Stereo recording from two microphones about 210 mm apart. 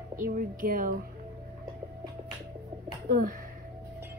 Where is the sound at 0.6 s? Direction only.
40° right (ahead or behind).